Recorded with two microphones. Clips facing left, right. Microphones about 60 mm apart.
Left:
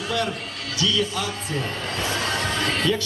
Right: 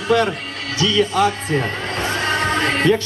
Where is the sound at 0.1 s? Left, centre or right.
Right.